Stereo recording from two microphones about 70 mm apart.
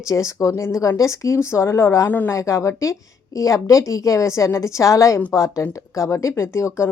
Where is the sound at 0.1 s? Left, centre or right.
Left.